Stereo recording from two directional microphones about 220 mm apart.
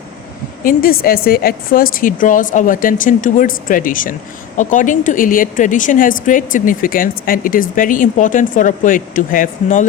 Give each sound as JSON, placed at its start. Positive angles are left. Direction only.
{"t": 0.6, "sound": "a woman's voice", "side_deg": 40}